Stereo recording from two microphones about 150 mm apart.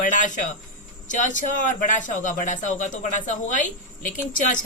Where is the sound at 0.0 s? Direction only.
55° left (ahead or behind).